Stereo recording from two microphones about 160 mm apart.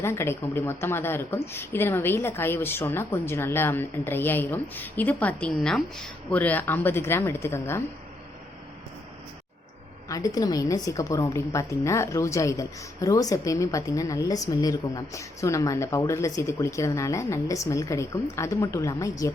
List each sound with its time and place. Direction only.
0.0 s a woman's voice: 15° left (ahead or behind)
10.1 s a woman's voice: 20° left (ahead or behind)